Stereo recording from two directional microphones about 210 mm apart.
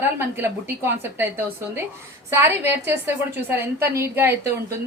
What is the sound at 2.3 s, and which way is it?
A woman's voice, 10° right (ahead or behind).